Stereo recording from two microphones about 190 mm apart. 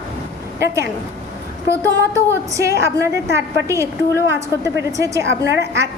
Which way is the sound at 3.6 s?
15° right (ahead or behind).